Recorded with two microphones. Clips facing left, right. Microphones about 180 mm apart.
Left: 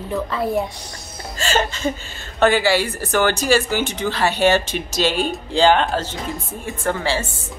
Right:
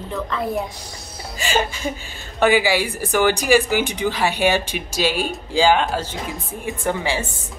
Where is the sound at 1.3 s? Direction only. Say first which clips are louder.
Left 1 dB; 10° right (ahead or behind).